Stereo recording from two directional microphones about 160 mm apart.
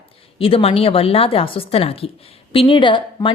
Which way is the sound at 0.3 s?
35° left (ahead or behind).